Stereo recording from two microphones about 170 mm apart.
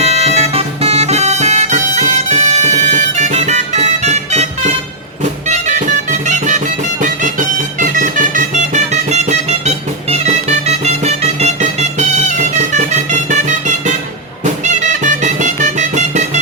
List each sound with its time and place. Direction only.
0.0 s music: 40° right (ahead or behind)